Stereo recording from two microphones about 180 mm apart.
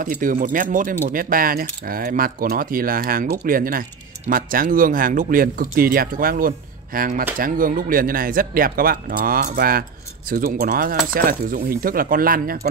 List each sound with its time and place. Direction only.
0.0 s speech: 50° right (ahead or behind)